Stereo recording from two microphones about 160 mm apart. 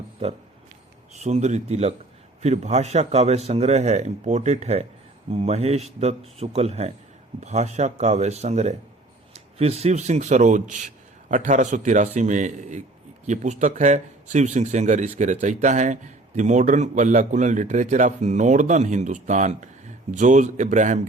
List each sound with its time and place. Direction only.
1.1 s speech: 45° right (ahead or behind)